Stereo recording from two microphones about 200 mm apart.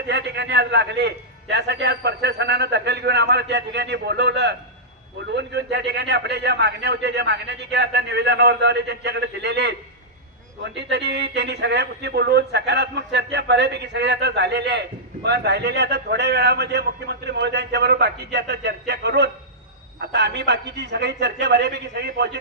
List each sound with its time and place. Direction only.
0.1 s a man's voice: 60° right (ahead or behind)
10.8 s a man's voice: 60° right (ahead or behind)